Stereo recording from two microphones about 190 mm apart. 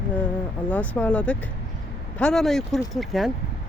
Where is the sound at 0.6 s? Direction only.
10° left (ahead or behind).